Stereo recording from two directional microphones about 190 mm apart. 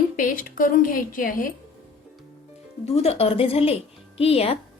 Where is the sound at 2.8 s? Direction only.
30° left (ahead or behind).